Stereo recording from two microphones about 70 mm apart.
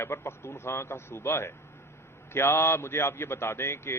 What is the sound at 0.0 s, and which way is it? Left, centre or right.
Speech, left.